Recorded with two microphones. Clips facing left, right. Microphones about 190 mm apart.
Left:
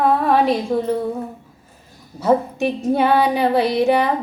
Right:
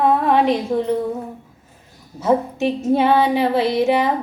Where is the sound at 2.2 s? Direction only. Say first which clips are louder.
Left 1 dB; 25° right (ahead or behind).